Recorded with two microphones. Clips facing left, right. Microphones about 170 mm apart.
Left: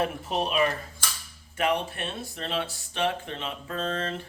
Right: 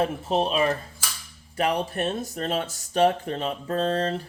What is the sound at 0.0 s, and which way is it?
Speech, 30° right (ahead or behind).